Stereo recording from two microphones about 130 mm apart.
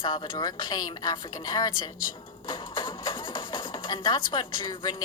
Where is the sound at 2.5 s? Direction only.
40° left (ahead or behind).